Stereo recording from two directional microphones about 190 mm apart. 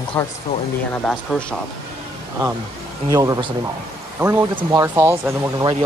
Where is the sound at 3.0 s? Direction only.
20° right (ahead or behind).